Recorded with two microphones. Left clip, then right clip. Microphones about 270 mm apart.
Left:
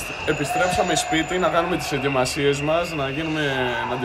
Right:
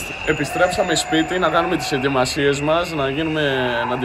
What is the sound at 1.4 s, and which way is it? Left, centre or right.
Speech, centre.